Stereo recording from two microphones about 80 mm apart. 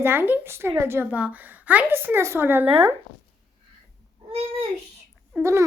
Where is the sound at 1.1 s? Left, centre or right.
Centre.